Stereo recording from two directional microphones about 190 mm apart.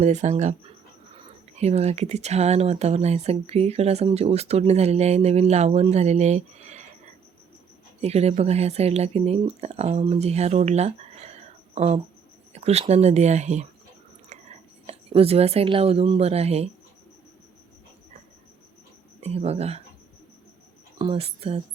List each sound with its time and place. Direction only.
0.0 s speech: 40° right (ahead or behind)
19.2 s speech: 35° right (ahead or behind)
21.0 s speech: 30° right (ahead or behind)